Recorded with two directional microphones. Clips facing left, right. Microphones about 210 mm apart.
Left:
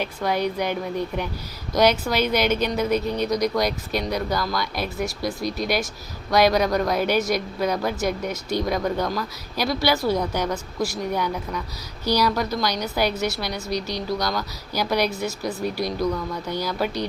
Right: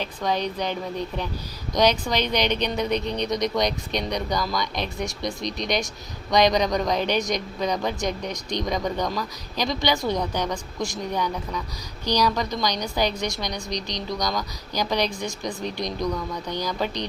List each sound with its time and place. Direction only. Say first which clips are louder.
0.0 s a woman's voice: left 2 dB; 10° left (ahead or behind)